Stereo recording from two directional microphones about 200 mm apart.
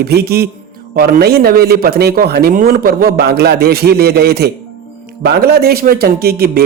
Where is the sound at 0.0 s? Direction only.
50° right (ahead or behind).